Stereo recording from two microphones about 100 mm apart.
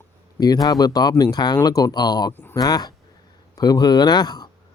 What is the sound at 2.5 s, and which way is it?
Speech, 40° left (ahead or behind).